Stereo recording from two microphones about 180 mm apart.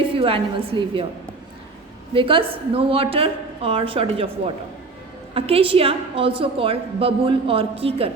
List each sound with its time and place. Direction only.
0.0 s a woman's voice: 30° right (ahead or behind)
2.1 s a woman's voice: 30° right (ahead or behind)